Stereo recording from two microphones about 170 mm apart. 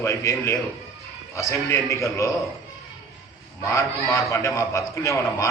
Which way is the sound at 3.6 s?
20° left (ahead or behind).